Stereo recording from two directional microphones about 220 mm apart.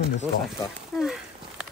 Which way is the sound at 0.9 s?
5° right (ahead or behind).